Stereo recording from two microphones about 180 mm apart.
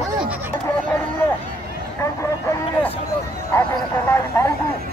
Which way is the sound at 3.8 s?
15° left (ahead or behind).